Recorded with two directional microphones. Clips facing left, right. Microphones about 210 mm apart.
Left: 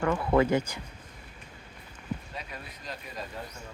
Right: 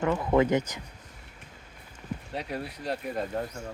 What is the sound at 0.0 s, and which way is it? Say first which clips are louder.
Speech: right 1 dB; 20° right (ahead or behind).